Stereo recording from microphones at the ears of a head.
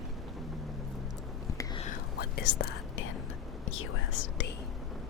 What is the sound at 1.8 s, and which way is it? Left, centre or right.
Whispering, left.